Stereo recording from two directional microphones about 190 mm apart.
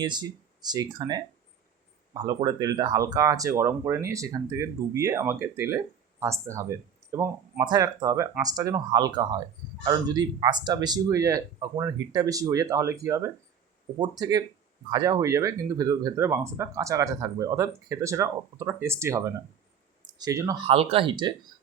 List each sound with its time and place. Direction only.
0.0 s speech: 25° right (ahead or behind)
20.7 s speech: 30° right (ahead or behind)